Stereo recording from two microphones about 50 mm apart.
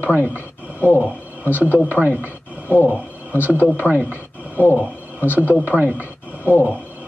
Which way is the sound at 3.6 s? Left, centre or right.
Right.